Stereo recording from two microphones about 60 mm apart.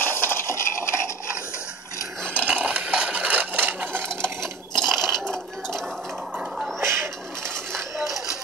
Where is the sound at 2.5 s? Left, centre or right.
Right.